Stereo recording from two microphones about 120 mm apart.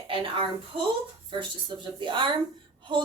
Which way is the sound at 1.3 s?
40° right (ahead or behind).